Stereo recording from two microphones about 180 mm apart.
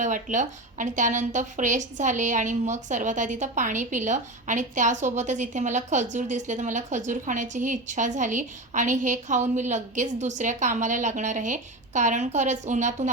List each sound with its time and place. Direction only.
0.0 s speech: 45° right (ahead or behind)